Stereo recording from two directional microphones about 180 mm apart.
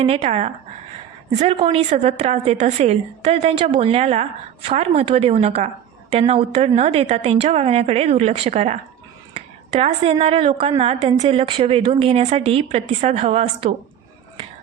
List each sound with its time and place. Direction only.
0.0 s a woman's voice: 35° right (ahead or behind)